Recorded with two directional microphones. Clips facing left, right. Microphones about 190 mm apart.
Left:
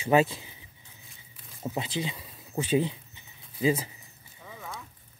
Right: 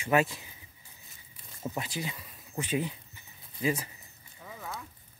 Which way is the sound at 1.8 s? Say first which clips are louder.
Left 6 dB; 25° left (ahead or behind).